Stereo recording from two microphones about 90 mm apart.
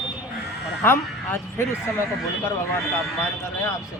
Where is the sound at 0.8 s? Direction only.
25° left (ahead or behind).